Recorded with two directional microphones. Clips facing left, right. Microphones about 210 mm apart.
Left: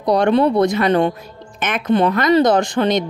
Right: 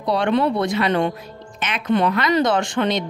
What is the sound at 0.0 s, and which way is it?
Speech, 40° left (ahead or behind).